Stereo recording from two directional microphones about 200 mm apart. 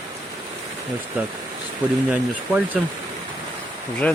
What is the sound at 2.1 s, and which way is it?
Speech, 5° right (ahead or behind).